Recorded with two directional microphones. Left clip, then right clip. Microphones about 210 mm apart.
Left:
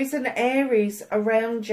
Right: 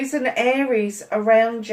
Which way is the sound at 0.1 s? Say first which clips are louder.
Right 7 dB; 40° left (ahead or behind).